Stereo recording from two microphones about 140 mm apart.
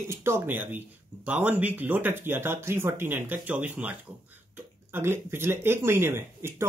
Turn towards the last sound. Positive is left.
turn(degrees=-20)  # may be behind; listen again after turning